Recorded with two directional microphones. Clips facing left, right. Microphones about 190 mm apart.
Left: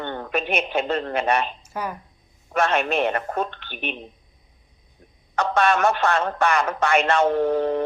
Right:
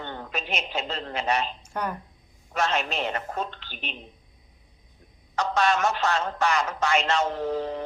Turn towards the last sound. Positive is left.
turn(degrees=60)  # may be behind; listen again after turning